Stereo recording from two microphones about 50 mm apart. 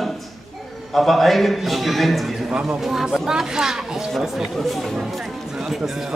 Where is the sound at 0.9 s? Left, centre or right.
Centre.